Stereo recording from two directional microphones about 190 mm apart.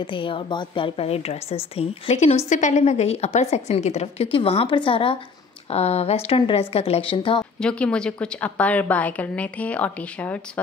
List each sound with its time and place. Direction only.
0.0 s a woman's voice: 25° left (ahead or behind)
7.6 s a woman's voice: 5° left (ahead or behind)